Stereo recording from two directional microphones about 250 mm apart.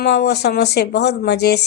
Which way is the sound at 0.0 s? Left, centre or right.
Left.